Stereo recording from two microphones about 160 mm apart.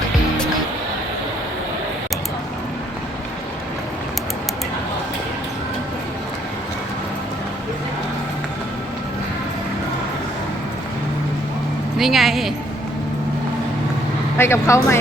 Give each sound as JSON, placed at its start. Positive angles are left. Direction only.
{"t": 11.9, "sound": "a woman's voice", "side_deg": 0}
{"t": 14.3, "sound": "speech", "side_deg": 15}